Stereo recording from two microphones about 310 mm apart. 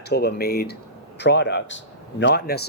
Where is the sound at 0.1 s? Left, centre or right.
Left.